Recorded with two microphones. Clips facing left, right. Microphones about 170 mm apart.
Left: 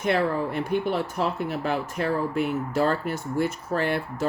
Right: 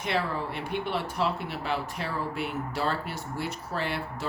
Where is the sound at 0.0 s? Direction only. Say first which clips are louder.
Left 6 dB; 45° left (ahead or behind).